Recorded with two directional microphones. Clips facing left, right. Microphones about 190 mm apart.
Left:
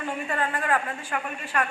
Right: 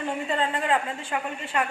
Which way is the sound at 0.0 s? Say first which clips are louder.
Right 2 dB; 20° right (ahead or behind).